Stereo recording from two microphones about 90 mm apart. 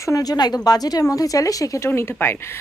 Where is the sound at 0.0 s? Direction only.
40° left (ahead or behind).